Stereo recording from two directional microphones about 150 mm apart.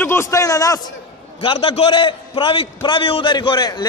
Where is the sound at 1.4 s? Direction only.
40° left (ahead or behind).